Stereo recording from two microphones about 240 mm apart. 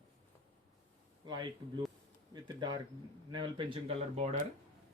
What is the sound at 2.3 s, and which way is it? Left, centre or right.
Speech, centre.